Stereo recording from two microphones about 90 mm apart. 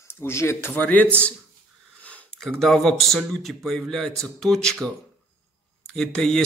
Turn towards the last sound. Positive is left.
turn(degrees=5)  # may be behind; listen again after turning